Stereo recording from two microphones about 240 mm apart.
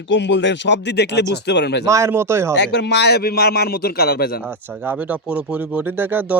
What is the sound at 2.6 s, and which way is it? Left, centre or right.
A man's voice, left.